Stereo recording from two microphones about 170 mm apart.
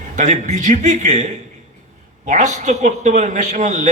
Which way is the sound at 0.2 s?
45° right (ahead or behind).